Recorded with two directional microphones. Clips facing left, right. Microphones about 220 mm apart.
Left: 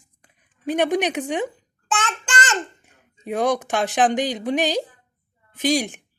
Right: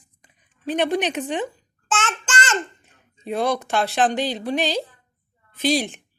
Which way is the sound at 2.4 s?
15° left (ahead or behind).